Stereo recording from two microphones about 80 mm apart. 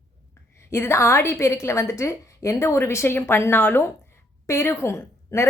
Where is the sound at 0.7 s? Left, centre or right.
Left.